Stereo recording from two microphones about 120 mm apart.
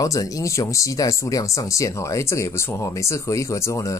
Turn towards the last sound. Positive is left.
turn(degrees=25)  # may be behind; listen again after turning